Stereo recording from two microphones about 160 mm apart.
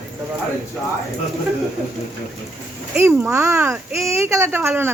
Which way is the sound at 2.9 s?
15° right (ahead or behind).